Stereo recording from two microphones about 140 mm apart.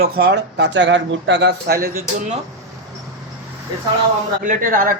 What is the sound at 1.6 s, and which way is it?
Speech, 90° right.